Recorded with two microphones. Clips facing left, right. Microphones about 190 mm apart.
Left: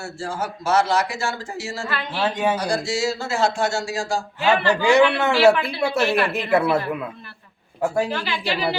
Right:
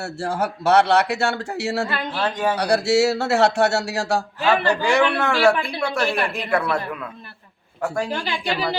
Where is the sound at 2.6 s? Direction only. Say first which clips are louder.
Right 6 dB; 70° right (ahead or behind).